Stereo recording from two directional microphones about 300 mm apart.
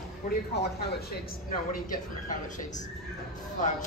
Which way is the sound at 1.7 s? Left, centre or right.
Left.